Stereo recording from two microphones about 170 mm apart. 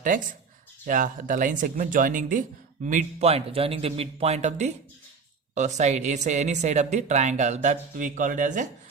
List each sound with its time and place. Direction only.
0.9 s a woman's voice: 50° right (ahead or behind)